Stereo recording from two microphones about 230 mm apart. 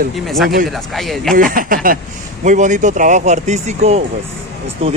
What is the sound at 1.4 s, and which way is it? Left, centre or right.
Speech, right.